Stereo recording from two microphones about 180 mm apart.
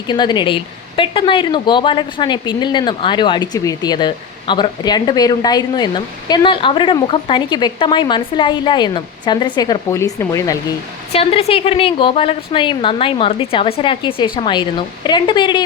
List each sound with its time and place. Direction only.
0.1 s speech: 25° left (ahead or behind)
11.1 s a woman's voice: 35° left (ahead or behind)